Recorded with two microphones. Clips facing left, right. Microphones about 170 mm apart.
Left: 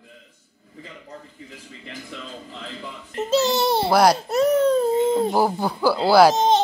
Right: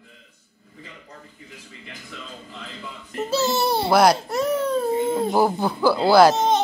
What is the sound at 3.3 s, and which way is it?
Speech, 20° left (ahead or behind).